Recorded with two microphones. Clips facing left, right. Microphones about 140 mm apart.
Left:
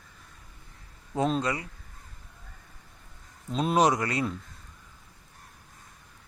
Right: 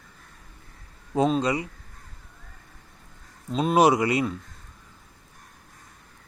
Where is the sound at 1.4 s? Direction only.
15° right (ahead or behind).